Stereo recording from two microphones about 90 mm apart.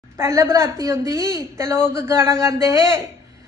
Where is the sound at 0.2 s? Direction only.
35° right (ahead or behind).